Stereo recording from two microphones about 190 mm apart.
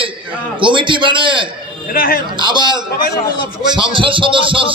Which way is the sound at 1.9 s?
50° left (ahead or behind).